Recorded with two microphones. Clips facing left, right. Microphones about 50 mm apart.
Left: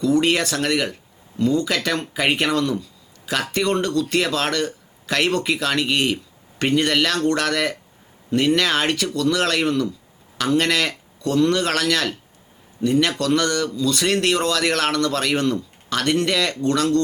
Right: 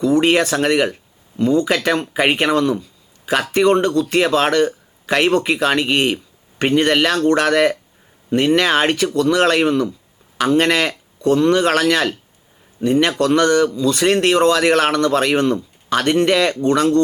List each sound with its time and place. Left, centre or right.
0.0 s speech: right